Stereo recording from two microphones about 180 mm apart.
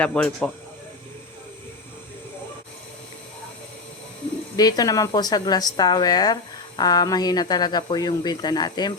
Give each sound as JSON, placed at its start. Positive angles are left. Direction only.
{"t": 0.0, "sound": "speech", "side_deg": 5}
{"t": 4.5, "sound": "speech", "side_deg": 20}